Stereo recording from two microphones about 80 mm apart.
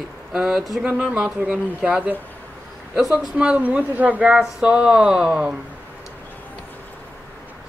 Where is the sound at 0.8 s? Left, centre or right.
Centre.